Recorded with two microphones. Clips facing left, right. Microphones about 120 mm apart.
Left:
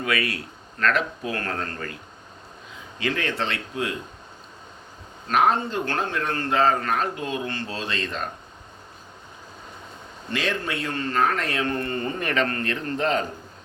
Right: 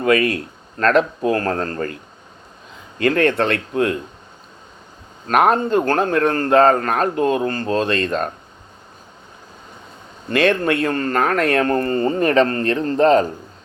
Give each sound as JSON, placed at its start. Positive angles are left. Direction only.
{"t": 0.0, "sound": "a man's voice", "side_deg": -45}
{"t": 3.0, "sound": "speech", "side_deg": -50}
{"t": 5.3, "sound": "speech", "side_deg": -60}
{"t": 10.2, "sound": "speech", "side_deg": -55}